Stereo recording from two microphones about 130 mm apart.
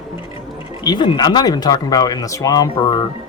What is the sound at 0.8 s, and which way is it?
Speech, 35° left (ahead or behind).